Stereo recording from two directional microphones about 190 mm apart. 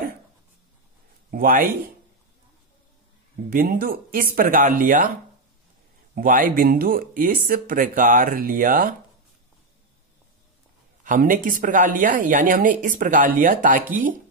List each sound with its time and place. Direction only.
1.3 s speech: 45° right (ahead or behind)
3.4 s speech: 45° right (ahead or behind)
6.1 s speech: 45° right (ahead or behind)
11.1 s speech: 45° right (ahead or behind)